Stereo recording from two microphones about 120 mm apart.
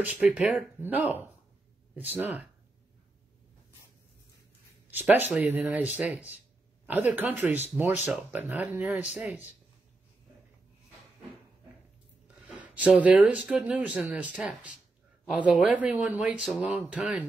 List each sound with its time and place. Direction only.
0.0 s speech: 15° right (ahead or behind)
5.1 s speech: 15° right (ahead or behind)
12.7 s speech: 10° right (ahead or behind)